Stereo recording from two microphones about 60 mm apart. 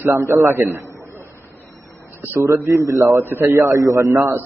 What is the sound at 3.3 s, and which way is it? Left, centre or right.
Speech, right.